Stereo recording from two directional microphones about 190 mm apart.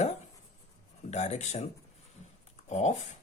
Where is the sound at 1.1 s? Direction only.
35° left (ahead or behind).